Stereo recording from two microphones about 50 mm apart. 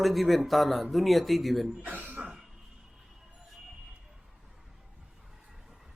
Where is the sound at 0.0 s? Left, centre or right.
Centre.